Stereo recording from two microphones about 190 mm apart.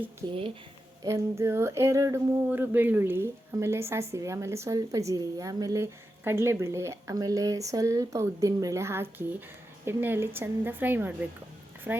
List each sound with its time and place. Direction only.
0.2 s a woman's voice: 20° right (ahead or behind)